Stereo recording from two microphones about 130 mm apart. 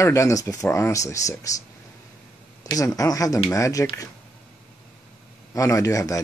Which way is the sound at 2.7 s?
25° left (ahead or behind).